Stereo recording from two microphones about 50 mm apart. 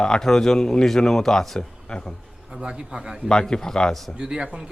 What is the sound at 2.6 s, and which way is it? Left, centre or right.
Speech, centre.